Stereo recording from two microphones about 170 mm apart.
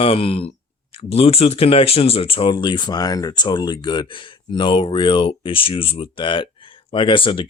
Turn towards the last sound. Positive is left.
turn(degrees=30)  # may be behind; listen again after turning